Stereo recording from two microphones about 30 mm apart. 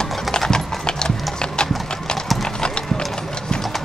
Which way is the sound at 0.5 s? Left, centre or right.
Left.